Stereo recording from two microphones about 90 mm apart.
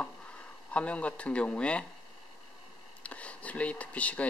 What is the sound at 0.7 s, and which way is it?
Speech, 15° left (ahead or behind).